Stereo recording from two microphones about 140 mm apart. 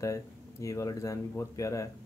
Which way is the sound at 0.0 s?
20° left (ahead or behind).